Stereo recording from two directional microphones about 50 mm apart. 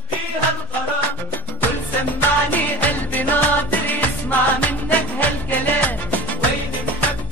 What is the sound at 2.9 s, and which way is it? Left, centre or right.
Music, left.